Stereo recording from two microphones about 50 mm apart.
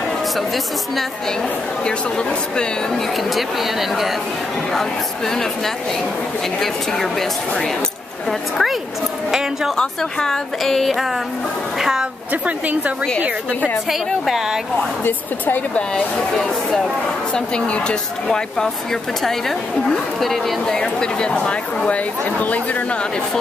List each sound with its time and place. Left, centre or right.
1.9 s speech: centre
3.3 s speech: centre
4.7 s speech: centre
6.6 s speech: centre
9.8 s speech: centre
11.8 s a woman's voice: centre
12.3 s a woman's voice: right
13.8 s speech: centre
15.0 s speech: left
15.9 s speech: centre
17.3 s speech: left
20.2 s speech: centre
20.6 s speech: centre; by 22.9 s left